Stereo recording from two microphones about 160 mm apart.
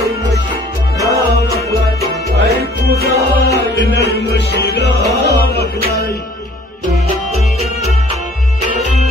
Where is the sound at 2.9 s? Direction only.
80° right.